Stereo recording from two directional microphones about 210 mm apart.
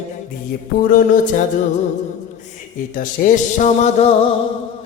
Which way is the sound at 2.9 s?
40° left (ahead or behind).